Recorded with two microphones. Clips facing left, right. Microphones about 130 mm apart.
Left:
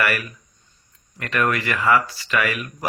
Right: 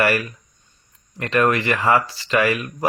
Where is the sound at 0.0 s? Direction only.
25° right (ahead or behind).